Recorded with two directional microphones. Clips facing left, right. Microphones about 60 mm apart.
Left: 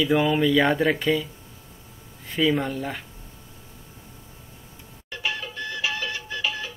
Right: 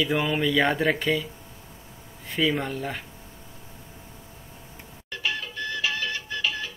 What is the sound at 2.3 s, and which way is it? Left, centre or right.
Speech, centre.